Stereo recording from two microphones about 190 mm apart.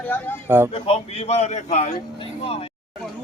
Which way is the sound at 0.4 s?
10° right (ahead or behind).